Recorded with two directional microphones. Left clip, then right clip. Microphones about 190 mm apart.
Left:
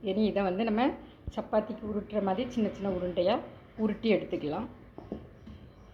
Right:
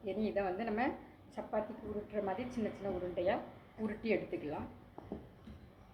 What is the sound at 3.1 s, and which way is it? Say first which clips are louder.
Speech: left 7 dB; 30° left (ahead or behind).